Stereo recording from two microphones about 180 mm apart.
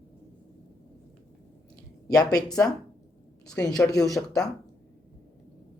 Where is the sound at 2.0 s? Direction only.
20° left (ahead or behind).